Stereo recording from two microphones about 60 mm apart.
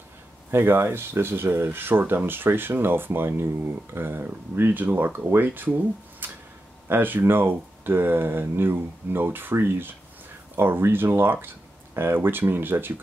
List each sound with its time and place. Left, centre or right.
0.5 s speech: right